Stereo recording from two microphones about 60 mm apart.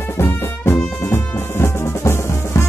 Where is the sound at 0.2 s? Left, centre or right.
Left.